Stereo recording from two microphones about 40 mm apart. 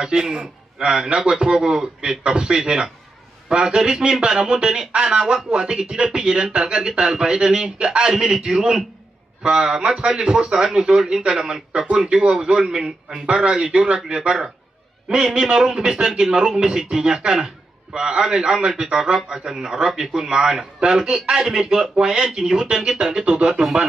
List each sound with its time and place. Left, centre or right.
0.0 s a man's voice: centre